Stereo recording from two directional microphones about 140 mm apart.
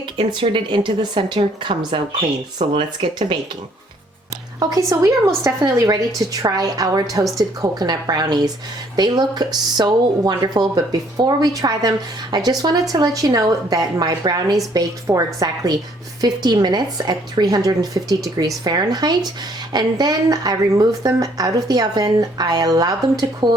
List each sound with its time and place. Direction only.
0.2 s a woman's voice: 35° right (ahead or behind)
4.6 s a woman's voice: 25° right (ahead or behind)